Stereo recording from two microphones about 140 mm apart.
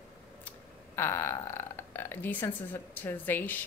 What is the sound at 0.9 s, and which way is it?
A woman's voice, 15° left (ahead or behind).